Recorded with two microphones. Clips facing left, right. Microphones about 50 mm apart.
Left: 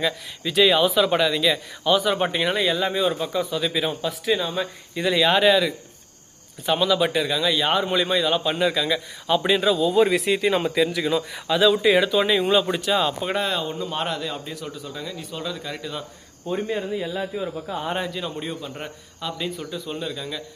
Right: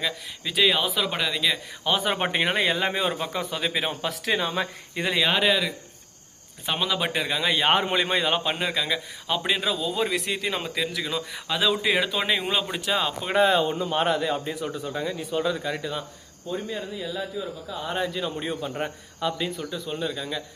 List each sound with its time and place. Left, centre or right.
0.0 s speech: centre
1.9 s speech: right
4.0 s speech: right
5.1 s speech: centre
6.7 s speech: centre; by 8.5 s right
8.5 s a man's voice: centre
9.5 s a man's voice: centre
16.5 s a man's voice: left
18.1 s speech: centre